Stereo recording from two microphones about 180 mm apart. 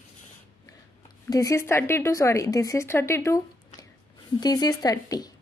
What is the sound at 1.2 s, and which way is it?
A woman's voice, 20° left (ahead or behind).